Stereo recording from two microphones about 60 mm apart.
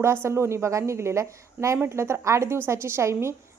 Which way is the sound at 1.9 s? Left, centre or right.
Right.